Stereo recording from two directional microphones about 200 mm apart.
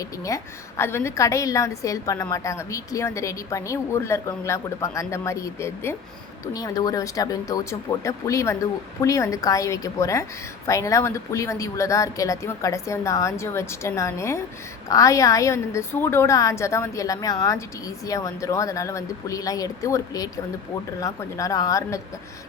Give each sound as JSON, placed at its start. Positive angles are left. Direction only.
{"t": 0.0, "sound": "a woman's voice", "side_deg": 15}